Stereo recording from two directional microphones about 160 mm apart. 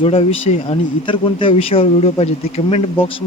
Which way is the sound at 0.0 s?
35° left (ahead or behind).